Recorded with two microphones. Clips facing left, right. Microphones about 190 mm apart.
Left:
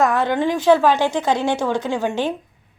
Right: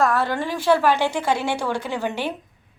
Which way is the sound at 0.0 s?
20° left (ahead or behind).